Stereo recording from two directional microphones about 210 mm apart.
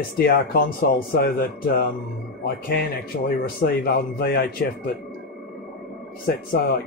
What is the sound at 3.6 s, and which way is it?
Speech, 45° left (ahead or behind).